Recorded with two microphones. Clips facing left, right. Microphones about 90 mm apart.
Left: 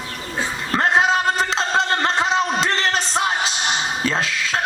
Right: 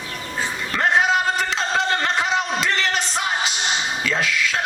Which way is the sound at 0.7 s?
35° left (ahead or behind).